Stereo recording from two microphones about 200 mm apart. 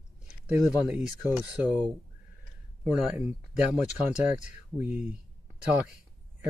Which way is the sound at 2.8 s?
5° right (ahead or behind).